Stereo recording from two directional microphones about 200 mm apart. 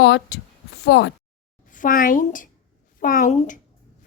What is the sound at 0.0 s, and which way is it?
Speech, 65° left (ahead or behind).